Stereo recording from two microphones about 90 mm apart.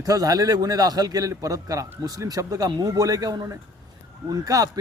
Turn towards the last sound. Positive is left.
turn(degrees=-40)  # may be behind; listen again after turning